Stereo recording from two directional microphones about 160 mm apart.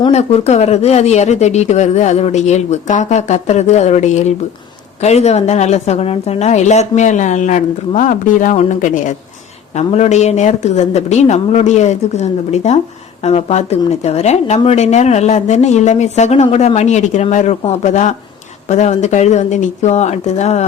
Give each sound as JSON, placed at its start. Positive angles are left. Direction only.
{"t": 0.1, "sound": "speech", "side_deg": 40}